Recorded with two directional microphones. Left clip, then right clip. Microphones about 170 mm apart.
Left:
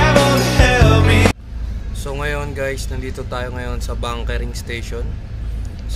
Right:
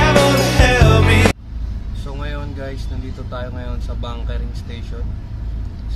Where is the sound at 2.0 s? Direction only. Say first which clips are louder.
Left 8 dB; 20° left (ahead or behind).